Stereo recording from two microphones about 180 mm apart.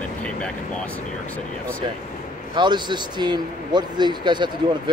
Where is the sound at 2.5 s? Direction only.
25° right (ahead or behind).